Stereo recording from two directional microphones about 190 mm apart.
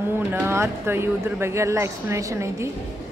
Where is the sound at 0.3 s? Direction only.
15° right (ahead or behind).